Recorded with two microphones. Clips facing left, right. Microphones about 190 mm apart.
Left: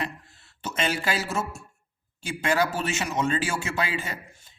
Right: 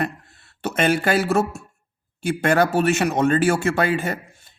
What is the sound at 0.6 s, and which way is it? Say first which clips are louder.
Speech: right 8 dB; 55° right (ahead or behind).